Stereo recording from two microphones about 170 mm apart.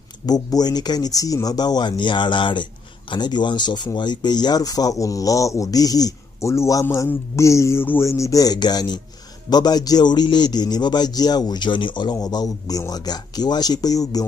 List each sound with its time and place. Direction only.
0.3 s speech: 25° left (ahead or behind)